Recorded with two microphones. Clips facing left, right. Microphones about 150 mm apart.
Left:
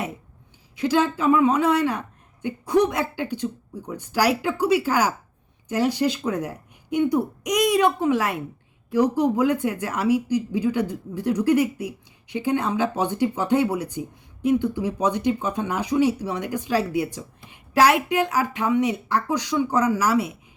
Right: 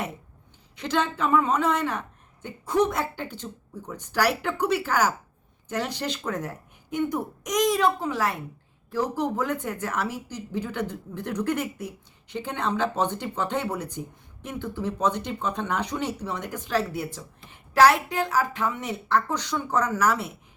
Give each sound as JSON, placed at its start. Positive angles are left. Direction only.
{"t": 0.8, "sound": "speech", "side_deg": 10}